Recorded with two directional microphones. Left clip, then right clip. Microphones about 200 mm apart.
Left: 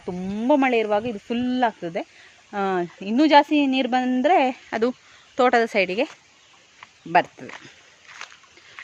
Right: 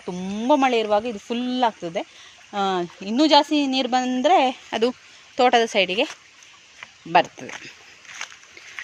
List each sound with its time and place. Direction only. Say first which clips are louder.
0.0 s speech: even; 25° left (ahead or behind)
8.2 s boat: right 4 dB; 50° right (ahead or behind)